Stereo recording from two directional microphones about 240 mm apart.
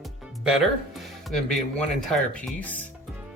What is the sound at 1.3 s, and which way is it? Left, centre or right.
Speech, centre.